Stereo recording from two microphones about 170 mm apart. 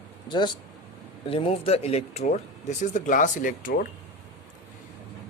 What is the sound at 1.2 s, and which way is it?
Speech, 35° left (ahead or behind).